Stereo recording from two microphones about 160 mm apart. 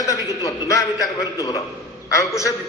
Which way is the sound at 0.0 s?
20° left (ahead or behind).